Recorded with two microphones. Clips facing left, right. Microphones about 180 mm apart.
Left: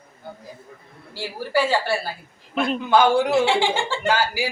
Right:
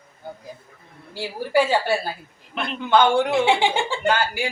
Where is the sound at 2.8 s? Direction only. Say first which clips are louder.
Right 1 dB; 5° left (ahead or behind).